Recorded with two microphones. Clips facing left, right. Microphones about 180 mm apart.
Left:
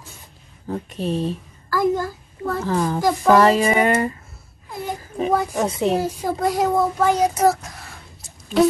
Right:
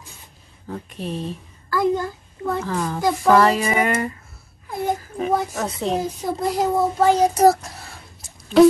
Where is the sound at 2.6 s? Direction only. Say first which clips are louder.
Left 4 dB; 30° left (ahead or behind).